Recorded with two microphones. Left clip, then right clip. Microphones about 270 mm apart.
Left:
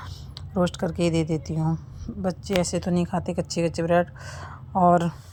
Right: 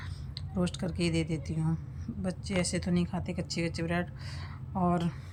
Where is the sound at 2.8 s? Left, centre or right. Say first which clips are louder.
Left 8 dB; centre.